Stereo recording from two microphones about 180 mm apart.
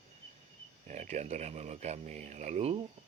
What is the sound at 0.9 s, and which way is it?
Speech, 40° right (ahead or behind).